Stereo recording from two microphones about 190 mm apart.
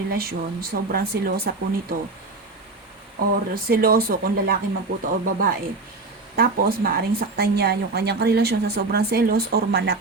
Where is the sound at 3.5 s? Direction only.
50° right (ahead or behind).